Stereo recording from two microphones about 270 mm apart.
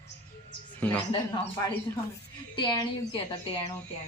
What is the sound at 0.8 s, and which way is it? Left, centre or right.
Speech, centre.